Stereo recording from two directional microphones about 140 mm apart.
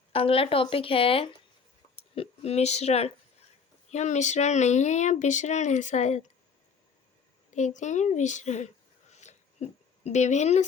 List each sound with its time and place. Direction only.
0.1 s speech: 45° left (ahead or behind)
7.5 s speech: 60° left (ahead or behind)